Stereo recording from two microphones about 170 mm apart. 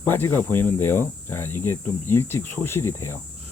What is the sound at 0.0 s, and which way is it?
Speech, 10° left (ahead or behind).